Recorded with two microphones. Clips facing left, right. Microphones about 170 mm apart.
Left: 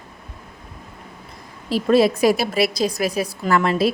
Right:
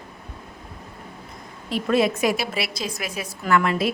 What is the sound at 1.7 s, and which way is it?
A woman's voice, 35° left (ahead or behind).